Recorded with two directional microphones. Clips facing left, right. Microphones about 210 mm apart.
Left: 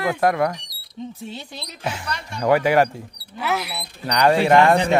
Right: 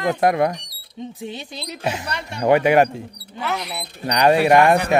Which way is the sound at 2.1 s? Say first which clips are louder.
Right 1 dB; 65° right (ahead or behind).